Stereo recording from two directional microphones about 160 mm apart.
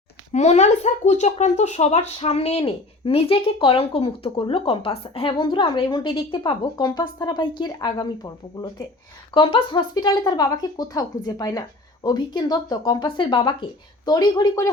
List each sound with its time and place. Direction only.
0.3 s speech: 45° left (ahead or behind); by 14.7 s 20° left (ahead or behind)